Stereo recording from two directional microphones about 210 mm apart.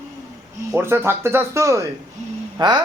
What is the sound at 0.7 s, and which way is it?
Speech, 10° right (ahead or behind).